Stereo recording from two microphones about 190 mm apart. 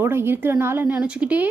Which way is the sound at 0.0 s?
10° right (ahead or behind).